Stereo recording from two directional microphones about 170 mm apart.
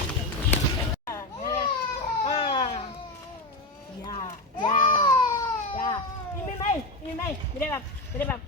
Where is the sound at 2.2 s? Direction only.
25° left (ahead or behind).